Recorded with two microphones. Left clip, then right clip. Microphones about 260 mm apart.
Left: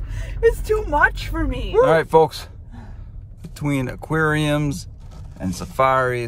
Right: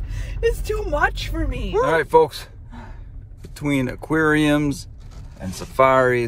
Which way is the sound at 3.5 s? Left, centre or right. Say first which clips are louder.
Right 2 dB; centre.